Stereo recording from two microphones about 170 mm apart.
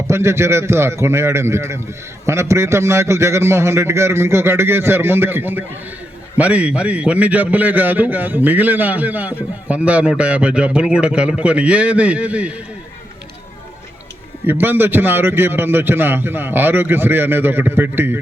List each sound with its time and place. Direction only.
0.1 s a man's voice: 15° right (ahead or behind)
14.4 s a man's voice: 10° right (ahead or behind)